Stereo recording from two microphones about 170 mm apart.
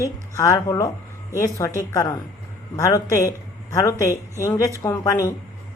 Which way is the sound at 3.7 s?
15° left (ahead or behind).